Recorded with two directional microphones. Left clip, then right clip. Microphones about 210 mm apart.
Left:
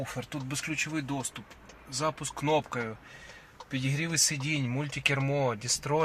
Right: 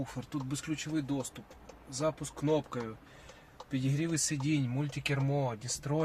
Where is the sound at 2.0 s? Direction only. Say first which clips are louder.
Left 2 dB; 25° left (ahead or behind).